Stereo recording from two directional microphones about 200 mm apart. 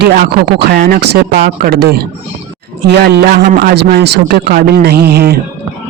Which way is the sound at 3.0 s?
45° right (ahead or behind).